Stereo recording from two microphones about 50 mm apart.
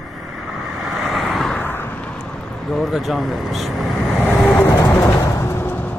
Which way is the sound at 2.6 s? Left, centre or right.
Centre.